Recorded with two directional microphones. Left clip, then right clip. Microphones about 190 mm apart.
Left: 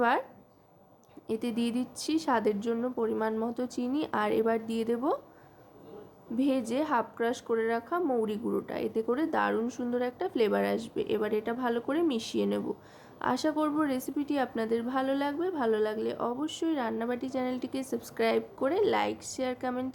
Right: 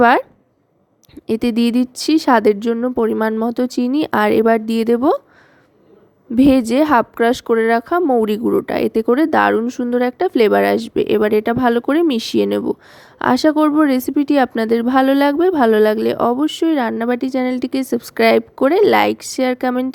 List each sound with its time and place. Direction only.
1.3 s speech: 45° right (ahead or behind)
6.3 s speech: 50° right (ahead or behind)